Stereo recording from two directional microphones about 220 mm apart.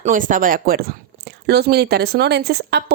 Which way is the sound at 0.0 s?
35° right (ahead or behind).